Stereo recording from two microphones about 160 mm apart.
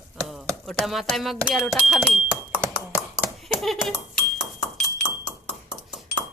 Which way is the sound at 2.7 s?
10° right (ahead or behind).